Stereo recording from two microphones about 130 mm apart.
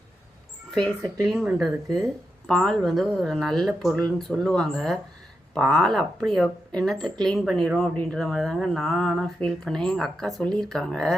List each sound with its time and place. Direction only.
1.5 s speech: 5° right (ahead or behind)